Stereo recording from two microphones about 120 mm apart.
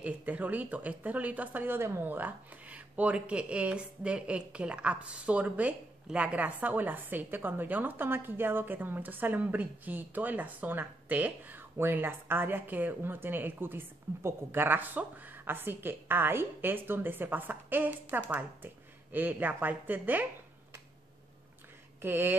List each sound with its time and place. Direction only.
0.0 s speech: 10° right (ahead or behind)
22.0 s speech: 20° right (ahead or behind)